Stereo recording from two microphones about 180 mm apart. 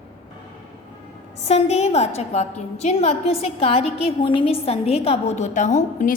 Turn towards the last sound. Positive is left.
turn(degrees=45)  # may be behind; listen again after turning